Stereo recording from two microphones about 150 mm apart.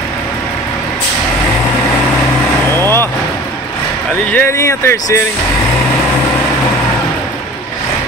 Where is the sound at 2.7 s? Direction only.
15° left (ahead or behind).